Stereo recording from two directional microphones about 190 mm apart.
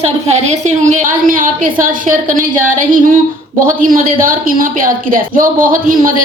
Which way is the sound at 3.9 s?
45° right (ahead or behind).